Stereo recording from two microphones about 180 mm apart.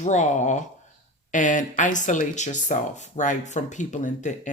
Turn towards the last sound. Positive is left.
turn(degrees=40)  # may be behind; listen again after turning